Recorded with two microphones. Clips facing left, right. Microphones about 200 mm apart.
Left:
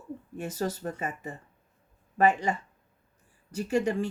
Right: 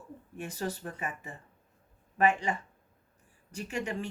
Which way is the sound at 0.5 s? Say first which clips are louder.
Left 5 dB; 40° left (ahead or behind).